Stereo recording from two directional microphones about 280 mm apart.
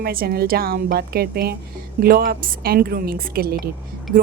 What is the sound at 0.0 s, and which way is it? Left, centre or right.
Speech, right.